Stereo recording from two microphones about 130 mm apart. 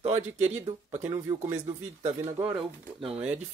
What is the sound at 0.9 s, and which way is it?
Speech, 15° right (ahead or behind).